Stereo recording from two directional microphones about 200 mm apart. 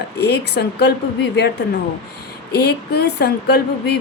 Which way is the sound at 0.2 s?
55° left (ahead or behind).